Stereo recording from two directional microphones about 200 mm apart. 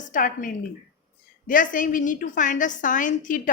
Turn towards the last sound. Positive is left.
turn(degrees=40)  # may be behind; listen again after turning